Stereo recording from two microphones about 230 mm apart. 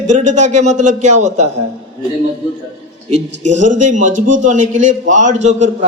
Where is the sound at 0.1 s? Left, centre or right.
Right.